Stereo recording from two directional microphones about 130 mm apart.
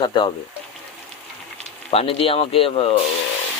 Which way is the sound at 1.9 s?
50° left (ahead or behind).